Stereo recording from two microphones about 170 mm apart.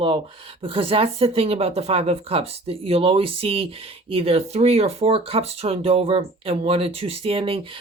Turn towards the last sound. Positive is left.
turn(degrees=-35)  # may be behind; listen again after turning